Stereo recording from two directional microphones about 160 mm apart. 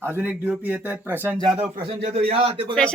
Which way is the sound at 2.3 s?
35° right (ahead or behind).